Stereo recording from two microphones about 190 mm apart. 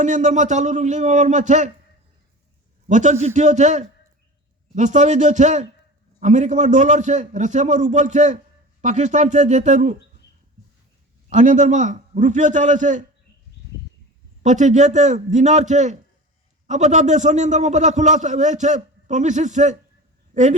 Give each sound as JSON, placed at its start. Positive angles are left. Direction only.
{"t": 0.0, "sound": "a man's voice", "side_deg": -40}
{"t": 2.8, "sound": "a man's voice", "side_deg": -40}
{"t": 11.3, "sound": "a man's voice", "side_deg": -40}
{"t": 14.4, "sound": "a man's voice", "side_deg": -40}